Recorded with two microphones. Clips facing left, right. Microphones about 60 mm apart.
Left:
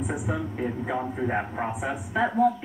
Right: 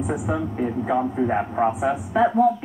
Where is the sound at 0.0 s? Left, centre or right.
Centre.